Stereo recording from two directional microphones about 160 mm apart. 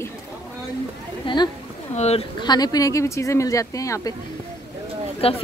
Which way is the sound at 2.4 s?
25° left (ahead or behind).